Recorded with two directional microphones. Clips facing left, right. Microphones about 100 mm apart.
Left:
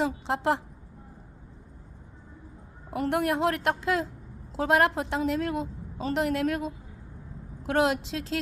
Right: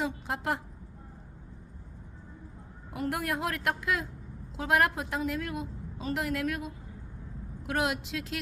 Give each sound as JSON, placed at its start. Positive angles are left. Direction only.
{"t": 0.0, "sound": "a woman's voice", "side_deg": 25}
{"t": 2.9, "sound": "a woman's voice", "side_deg": 25}